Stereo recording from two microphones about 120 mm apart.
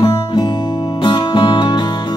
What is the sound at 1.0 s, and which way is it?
Music, 45° left (ahead or behind).